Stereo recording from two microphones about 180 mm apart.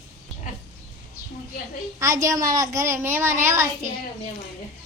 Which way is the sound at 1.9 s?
15° right (ahead or behind).